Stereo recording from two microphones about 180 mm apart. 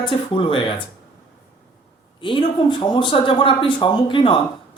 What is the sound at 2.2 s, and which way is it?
Speech, 25° left (ahead or behind).